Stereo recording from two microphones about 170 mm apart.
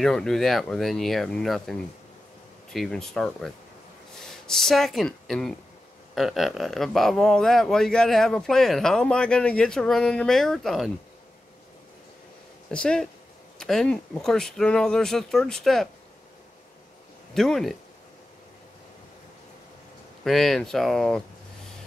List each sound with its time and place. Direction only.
0.0 s speech: 5° left (ahead or behind)
12.7 s speech: 5° left (ahead or behind)
17.3 s speech: centre (ahead or behind)
20.2 s speech: centre (ahead or behind)